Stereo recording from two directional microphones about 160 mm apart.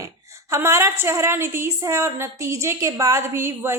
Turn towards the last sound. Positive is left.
turn(degrees=-15)  # may be behind; listen again after turning